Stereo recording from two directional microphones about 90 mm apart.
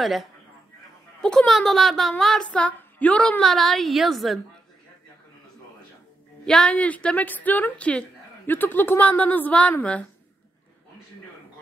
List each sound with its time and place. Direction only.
0.0 s a woman's voice: centre (ahead or behind)
6.4 s a woman's voice: 10° left (ahead or behind)